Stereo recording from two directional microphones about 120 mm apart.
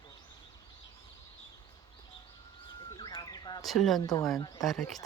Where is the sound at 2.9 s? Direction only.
35° left (ahead or behind).